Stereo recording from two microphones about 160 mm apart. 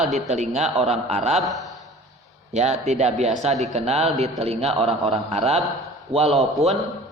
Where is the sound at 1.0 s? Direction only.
40° right (ahead or behind).